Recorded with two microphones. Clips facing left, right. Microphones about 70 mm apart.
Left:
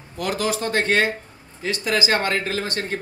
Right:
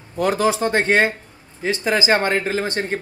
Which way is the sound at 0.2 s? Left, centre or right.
Right.